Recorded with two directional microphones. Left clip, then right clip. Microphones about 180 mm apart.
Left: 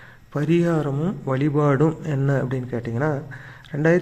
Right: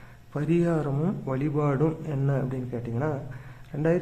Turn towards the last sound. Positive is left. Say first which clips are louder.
# left 6 dB
turn(degrees=20)  # may be behind; listen again after turning